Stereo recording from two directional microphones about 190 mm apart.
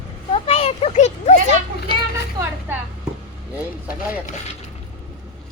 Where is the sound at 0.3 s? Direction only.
30° left (ahead or behind).